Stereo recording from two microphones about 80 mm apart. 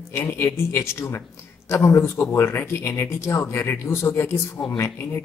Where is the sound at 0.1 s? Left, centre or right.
Left.